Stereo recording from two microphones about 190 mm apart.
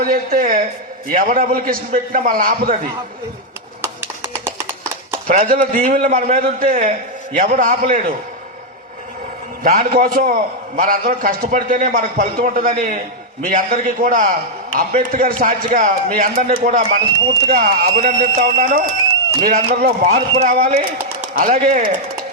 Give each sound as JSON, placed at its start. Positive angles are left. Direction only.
{"t": 0.0, "sound": "a man's voice", "side_deg": -50}
{"t": 3.8, "sound": "a sound", "side_deg": -10}
{"t": 5.3, "sound": "a man's voice", "side_deg": -40}
{"t": 9.6, "sound": "a man's voice", "side_deg": -45}
{"t": 20.1, "sound": "speech", "side_deg": -30}
{"t": 20.4, "sound": "a man's voice", "side_deg": -45}